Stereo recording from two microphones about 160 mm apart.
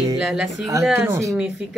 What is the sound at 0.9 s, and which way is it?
Speech, 15° right (ahead or behind).